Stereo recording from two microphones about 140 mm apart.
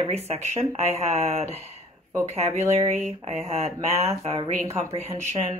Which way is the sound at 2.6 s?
15° right (ahead or behind).